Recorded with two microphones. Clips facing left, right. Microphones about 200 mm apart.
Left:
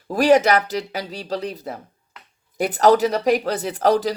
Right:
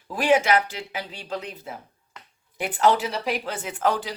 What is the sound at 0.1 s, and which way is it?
Speech, 40° left (ahead or behind).